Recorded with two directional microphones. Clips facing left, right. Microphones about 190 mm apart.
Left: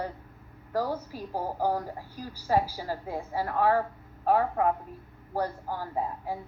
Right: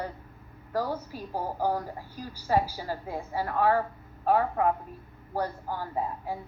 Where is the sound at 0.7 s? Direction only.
40° left (ahead or behind).